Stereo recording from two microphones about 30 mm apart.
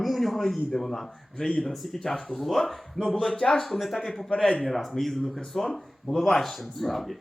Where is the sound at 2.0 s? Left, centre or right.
Centre.